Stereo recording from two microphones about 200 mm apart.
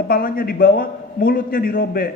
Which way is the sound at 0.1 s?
45° left (ahead or behind).